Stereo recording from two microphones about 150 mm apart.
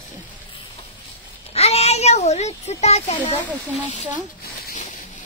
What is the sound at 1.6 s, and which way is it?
A child's voice, 45° left (ahead or behind).